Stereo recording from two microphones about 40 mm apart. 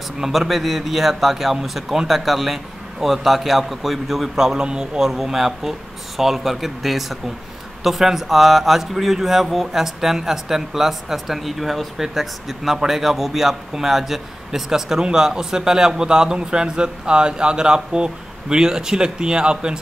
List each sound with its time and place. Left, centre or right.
0.2 s a man's voice: centre; by 19.8 s right